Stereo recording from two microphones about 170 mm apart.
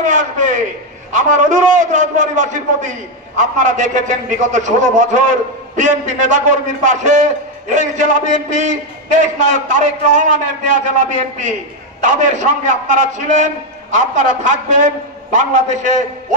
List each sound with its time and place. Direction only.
0.0 s a man's voice: 50° right (ahead or behind)